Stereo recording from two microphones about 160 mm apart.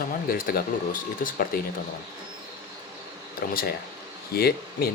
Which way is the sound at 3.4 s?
65° left (ahead or behind).